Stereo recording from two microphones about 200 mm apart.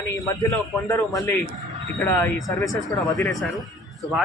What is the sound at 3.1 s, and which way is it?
Speech, centre (ahead or behind).